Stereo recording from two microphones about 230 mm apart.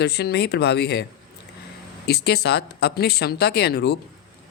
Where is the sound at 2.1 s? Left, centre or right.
Left.